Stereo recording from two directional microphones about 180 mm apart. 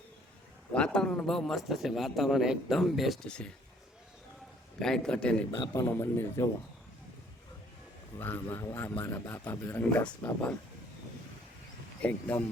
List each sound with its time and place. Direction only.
0.7 s a man's voice: 5° left (ahead or behind)
4.8 s a man's voice: 5° left (ahead or behind)
5.5 s a man's voice: 20° left (ahead or behind)
8.2 s a man's voice: 10° left (ahead or behind)
12.0 s a man's voice: 10° left (ahead or behind)